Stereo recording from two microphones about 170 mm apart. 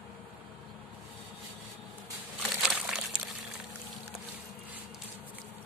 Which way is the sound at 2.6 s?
5° right (ahead or behind).